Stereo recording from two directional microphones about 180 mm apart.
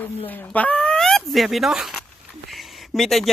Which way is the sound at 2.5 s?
Centre (ahead or behind).